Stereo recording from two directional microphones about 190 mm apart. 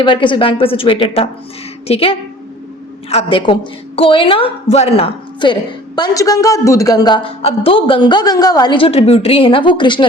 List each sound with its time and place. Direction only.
0.0 s a woman's voice: 25° left (ahead or behind)